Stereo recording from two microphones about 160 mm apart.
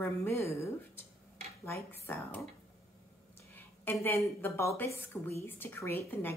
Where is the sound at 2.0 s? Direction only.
10° left (ahead or behind).